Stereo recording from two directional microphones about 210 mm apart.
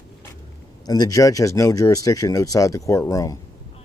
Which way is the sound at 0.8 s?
20° left (ahead or behind).